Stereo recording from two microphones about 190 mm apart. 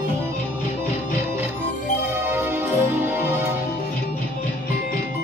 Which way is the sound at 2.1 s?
10° right (ahead or behind).